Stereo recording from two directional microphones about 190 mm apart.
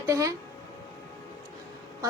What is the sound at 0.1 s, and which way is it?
Speech, 15° right (ahead or behind).